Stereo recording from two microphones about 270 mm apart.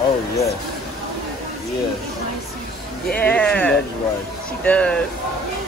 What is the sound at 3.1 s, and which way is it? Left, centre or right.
Speech, centre.